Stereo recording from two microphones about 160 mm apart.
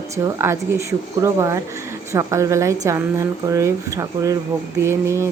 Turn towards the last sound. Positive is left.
turn(degrees=-20)  # may be behind; listen again after turning